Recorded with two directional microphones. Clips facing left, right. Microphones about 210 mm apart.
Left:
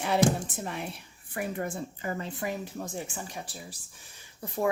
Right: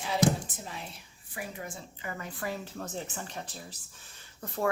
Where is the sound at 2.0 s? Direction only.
30° left (ahead or behind).